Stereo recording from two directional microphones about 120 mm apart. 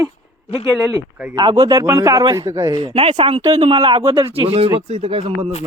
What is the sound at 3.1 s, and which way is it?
Speech, 45° right (ahead or behind).